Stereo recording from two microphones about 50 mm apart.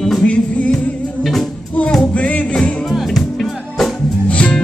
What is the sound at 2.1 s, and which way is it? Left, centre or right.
Music, left.